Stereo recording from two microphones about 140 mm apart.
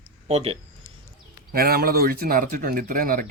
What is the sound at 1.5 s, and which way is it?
Speech, 90° right.